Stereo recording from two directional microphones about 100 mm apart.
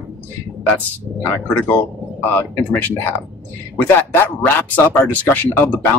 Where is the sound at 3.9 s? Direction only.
20° left (ahead or behind).